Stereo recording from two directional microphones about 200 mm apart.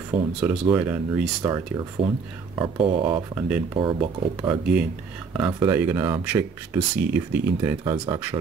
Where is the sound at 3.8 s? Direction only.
25° right (ahead or behind).